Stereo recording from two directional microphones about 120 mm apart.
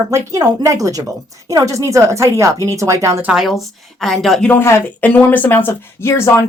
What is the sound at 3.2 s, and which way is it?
A woman's voice, 5° right (ahead or behind).